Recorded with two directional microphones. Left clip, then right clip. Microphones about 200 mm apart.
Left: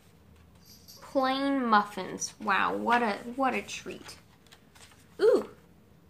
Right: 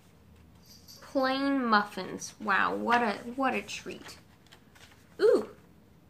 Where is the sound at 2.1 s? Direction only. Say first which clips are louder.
Left 4 dB; 20° left (ahead or behind).